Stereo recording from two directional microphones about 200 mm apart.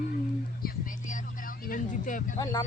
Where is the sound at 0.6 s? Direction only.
45° left (ahead or behind).